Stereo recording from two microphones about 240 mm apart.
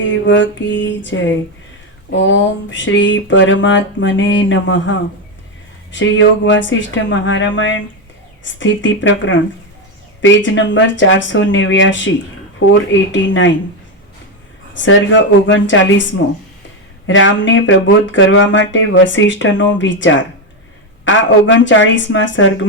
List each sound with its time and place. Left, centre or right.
0.0 s speech: left
14.7 s speech: left